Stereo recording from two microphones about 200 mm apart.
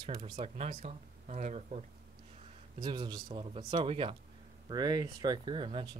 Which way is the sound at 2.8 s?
20° right (ahead or behind).